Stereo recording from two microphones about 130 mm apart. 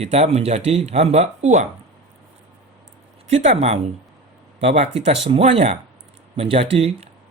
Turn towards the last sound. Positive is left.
turn(degrees=-50)  # may be behind; listen again after turning